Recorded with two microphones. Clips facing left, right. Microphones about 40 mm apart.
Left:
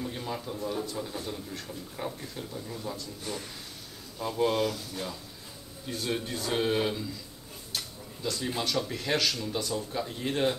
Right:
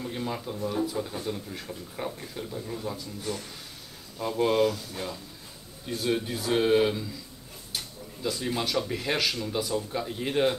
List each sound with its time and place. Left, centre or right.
0.0 s speech: centre
4.2 s speech: centre